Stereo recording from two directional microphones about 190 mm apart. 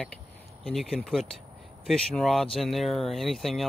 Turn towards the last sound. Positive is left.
turn(degrees=0)  # may be behind; listen again after turning